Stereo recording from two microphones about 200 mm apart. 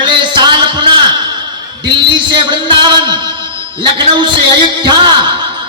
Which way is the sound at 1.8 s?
25° right (ahead or behind).